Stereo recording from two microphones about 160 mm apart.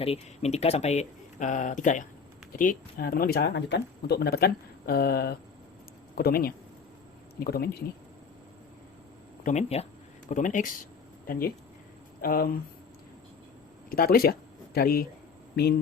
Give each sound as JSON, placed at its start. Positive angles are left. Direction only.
{"t": 0.0, "sound": "speech", "side_deg": 40}
{"t": 9.4, "sound": "speech", "side_deg": 45}
{"t": 11.3, "sound": "speech", "side_deg": 65}
{"t": 13.9, "sound": "speech", "side_deg": 65}